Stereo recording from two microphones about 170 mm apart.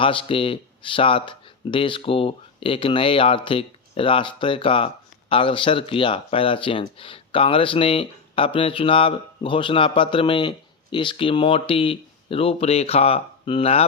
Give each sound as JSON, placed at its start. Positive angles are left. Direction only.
{"t": 0.0, "sound": "speech", "side_deg": 30}